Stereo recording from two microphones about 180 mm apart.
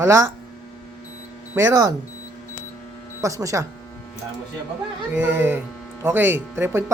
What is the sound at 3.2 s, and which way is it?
Speech, 15° right (ahead or behind).